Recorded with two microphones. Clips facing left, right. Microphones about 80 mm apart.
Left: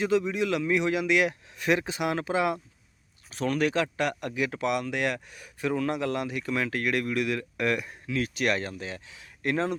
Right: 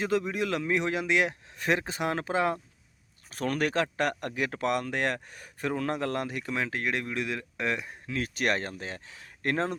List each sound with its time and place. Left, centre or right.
0.0 s speech: right
6.5 s speech: right
8.0 s speech: right